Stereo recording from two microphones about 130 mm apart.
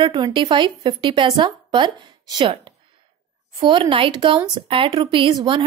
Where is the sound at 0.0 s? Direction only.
35° right (ahead or behind).